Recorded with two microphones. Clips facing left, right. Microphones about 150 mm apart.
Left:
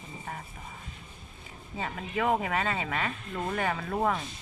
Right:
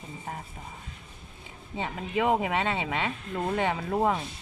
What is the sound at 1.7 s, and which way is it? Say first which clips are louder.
Speech: right 3 dB; 20° right (ahead or behind).